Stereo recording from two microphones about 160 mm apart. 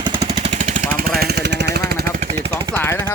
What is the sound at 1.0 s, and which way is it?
Vehicle, 70° right (ahead or behind).